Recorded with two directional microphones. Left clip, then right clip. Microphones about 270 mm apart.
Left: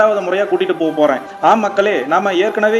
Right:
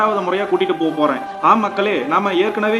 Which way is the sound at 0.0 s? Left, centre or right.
Centre.